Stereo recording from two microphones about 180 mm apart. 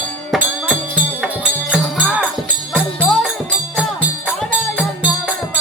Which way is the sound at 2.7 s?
10° left (ahead or behind).